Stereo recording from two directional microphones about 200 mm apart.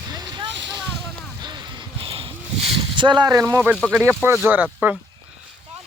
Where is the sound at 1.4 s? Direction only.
20° right (ahead or behind).